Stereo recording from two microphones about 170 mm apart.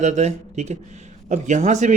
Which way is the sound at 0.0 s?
40° right (ahead or behind).